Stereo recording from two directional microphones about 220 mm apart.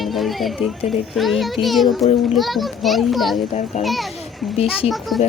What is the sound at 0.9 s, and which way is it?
A child's voice, centre (ahead or behind).